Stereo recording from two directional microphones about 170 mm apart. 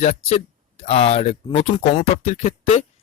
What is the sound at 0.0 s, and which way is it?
A man's voice, 40° left (ahead or behind).